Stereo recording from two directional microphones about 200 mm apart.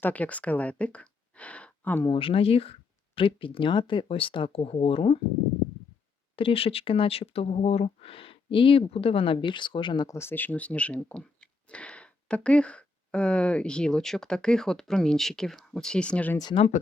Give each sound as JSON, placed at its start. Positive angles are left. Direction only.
{"t": 0.0, "sound": "speech", "side_deg": 5}
{"t": 2.0, "sound": "speech", "side_deg": 25}
{"t": 6.3, "sound": "speech", "side_deg": 30}
{"t": 16.4, "sound": "speech", "side_deg": 20}